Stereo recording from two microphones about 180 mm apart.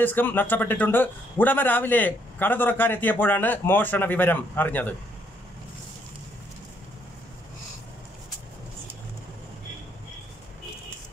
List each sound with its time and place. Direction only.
0.0 s a man's voice: 10° left (ahead or behind)